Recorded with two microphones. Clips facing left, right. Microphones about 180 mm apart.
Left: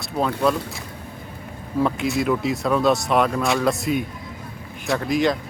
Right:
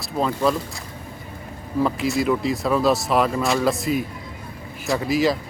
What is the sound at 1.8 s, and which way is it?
Speech, centre (ahead or behind).